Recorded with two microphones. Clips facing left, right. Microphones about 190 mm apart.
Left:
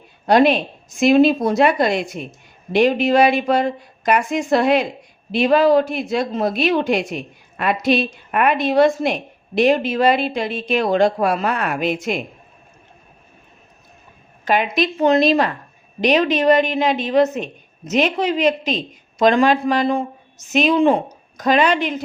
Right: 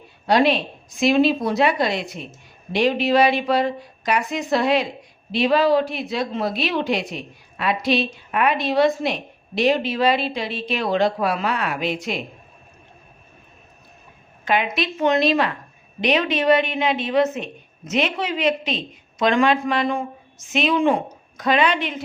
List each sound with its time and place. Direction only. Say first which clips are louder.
0.3 s speech: left 4 dB; 50° left (ahead or behind)
14.4 s a woman's voice: left 4 dB; 40° left (ahead or behind)